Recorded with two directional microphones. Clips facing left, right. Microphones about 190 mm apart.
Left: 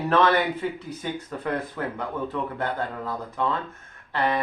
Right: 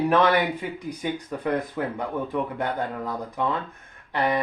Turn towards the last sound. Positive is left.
turn(degrees=-15)  # may be behind; listen again after turning